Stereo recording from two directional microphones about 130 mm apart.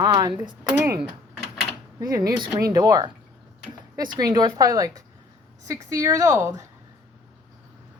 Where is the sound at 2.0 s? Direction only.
25° right (ahead or behind).